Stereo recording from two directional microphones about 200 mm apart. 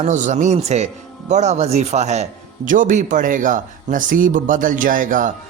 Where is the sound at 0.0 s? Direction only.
35° right (ahead or behind).